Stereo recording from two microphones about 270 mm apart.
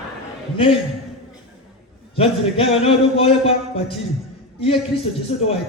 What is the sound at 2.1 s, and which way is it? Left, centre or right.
A man's voice, left.